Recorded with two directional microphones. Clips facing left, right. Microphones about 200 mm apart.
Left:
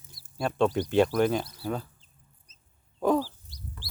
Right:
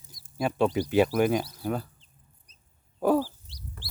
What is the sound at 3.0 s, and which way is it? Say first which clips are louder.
Dog: right 1 dB; 10° right (ahead or behind).